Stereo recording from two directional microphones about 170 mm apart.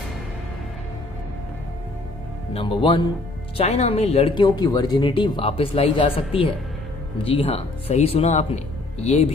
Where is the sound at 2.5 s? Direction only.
30° left (ahead or behind).